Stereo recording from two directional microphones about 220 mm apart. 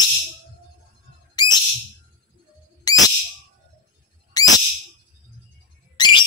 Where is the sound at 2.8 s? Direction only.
15° left (ahead or behind).